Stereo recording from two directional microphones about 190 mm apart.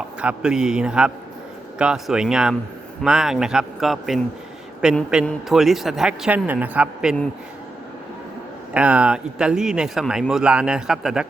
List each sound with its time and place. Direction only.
0.2 s speech: 5° right (ahead or behind)
8.7 s speech: 5° right (ahead or behind)